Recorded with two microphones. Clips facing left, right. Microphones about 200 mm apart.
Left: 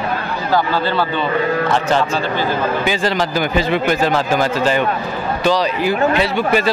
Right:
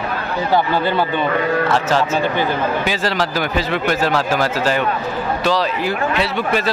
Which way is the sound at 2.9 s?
Centre (ahead or behind).